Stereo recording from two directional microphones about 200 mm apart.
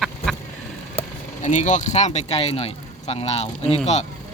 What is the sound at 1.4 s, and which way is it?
Speech, 35° left (ahead or behind).